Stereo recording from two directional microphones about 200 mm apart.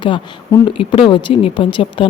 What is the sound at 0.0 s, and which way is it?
Speech, 25° left (ahead or behind).